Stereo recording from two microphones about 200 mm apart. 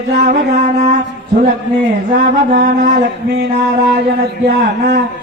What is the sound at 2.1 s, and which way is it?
Speech, 45° right (ahead or behind).